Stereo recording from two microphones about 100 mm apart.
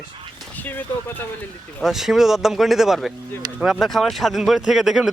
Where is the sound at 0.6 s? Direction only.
20° left (ahead or behind).